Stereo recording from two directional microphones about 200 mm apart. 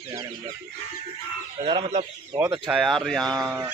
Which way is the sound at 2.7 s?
Centre (ahead or behind).